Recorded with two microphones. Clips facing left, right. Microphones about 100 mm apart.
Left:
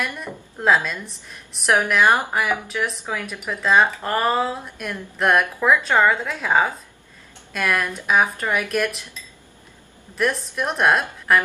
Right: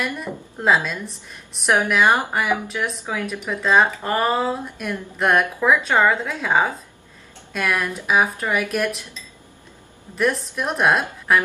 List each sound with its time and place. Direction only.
0.0 s speech: centre (ahead or behind)
10.1 s speech: centre (ahead or behind)